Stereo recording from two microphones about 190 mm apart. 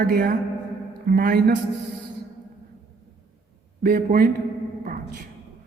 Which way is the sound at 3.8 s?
50° right (ahead or behind).